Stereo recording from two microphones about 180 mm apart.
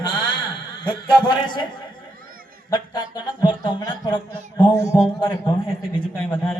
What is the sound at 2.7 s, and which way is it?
A man's voice, 25° left (ahead or behind).